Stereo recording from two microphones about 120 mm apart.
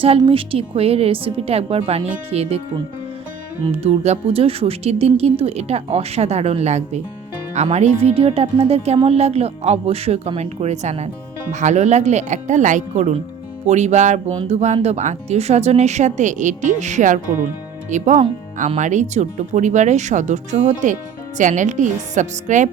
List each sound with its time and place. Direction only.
0.0 s a woman's voice: 50° right (ahead or behind)
3.7 s a woman's voice: 65° right (ahead or behind)
11.5 s speech: 80° right
13.7 s speech: 70° right (ahead or behind); by 22.7 s 90° right